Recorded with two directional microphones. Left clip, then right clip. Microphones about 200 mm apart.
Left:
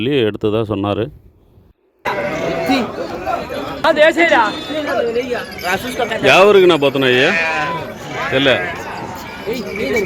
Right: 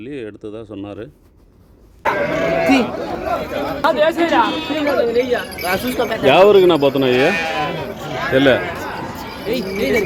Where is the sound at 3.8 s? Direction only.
30° left (ahead or behind).